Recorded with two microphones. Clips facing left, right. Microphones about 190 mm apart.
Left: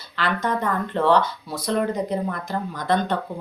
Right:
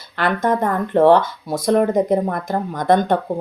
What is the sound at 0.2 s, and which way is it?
Speech, 50° right (ahead or behind).